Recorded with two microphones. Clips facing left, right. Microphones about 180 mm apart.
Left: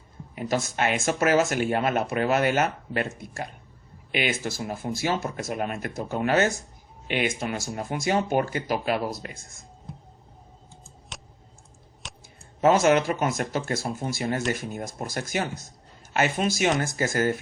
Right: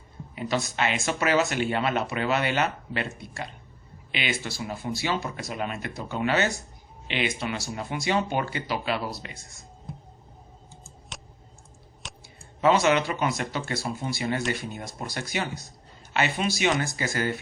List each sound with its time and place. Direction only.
0.3 s speech: 50° left (ahead or behind)
11.1 s clicking: centre (ahead or behind)
12.0 s a sound: centre (ahead or behind)
12.6 s speech: 45° left (ahead or behind)